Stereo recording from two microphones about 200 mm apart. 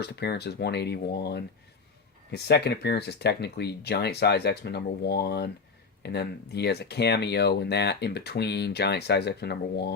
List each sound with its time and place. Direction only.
0.0 s speech: 55° left (ahead or behind)